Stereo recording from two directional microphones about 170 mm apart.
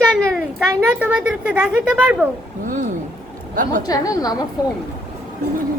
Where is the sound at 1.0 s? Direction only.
5° right (ahead or behind).